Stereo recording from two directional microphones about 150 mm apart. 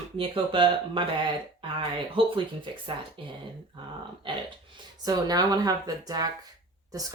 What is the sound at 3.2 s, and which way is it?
Speech, 35° right (ahead or behind).